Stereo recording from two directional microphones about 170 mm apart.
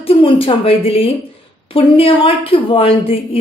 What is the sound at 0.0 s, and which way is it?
A woman's voice, 35° left (ahead or behind).